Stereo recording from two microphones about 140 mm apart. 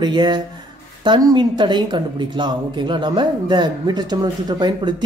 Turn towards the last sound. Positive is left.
turn(degrees=-30)  # may be behind; listen again after turning